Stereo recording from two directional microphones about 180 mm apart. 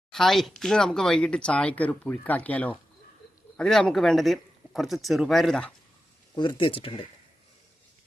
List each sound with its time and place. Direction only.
0.1 s speech: centre (ahead or behind)
6.3 s speech: 25° left (ahead or behind)